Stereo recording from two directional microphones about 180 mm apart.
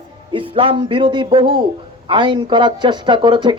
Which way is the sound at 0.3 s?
30° right (ahead or behind).